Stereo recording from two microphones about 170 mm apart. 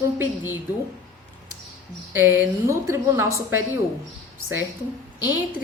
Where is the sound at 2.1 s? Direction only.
10° right (ahead or behind).